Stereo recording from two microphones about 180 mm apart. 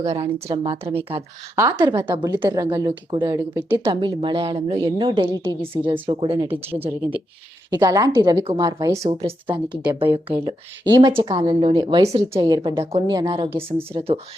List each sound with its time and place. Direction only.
0.0 s speech: 40° right (ahead or behind)
0.4 s a woman's voice: 25° right (ahead or behind)
4.0 s a woman's voice: 25° right (ahead or behind)
7.7 s a woman's voice: 20° right (ahead or behind)
9.0 s a woman's voice: 35° right (ahead or behind)
13.5 s speech: 10° right (ahead or behind)
13.9 s speech: 30° right (ahead or behind)